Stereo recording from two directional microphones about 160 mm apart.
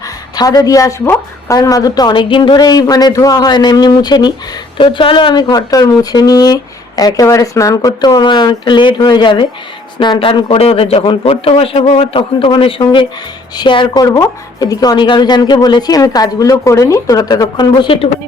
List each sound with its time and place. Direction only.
0.0 s a woman's voice: 25° left (ahead or behind)